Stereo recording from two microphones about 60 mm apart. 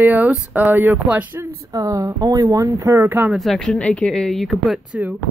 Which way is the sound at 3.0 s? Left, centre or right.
Right.